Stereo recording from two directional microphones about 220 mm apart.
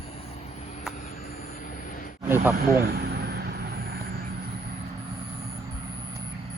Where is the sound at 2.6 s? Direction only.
45° right (ahead or behind).